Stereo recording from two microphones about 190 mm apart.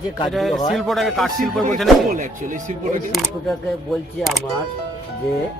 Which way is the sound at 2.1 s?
40° right (ahead or behind).